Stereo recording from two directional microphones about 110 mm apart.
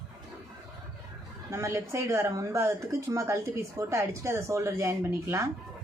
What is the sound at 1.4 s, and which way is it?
Speech, 25° right (ahead or behind).